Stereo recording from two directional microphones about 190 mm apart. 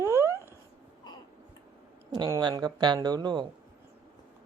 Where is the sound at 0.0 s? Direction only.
15° right (ahead or behind).